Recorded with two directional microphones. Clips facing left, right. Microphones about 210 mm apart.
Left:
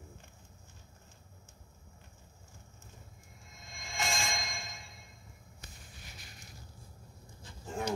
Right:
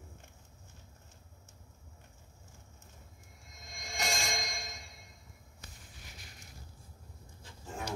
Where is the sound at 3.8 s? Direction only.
45° right (ahead or behind).